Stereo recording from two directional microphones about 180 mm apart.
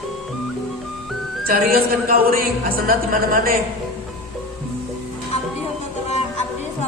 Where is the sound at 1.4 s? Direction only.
55° right (ahead or behind).